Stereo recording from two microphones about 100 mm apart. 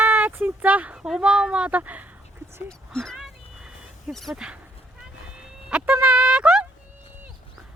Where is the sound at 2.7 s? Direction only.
5° left (ahead or behind).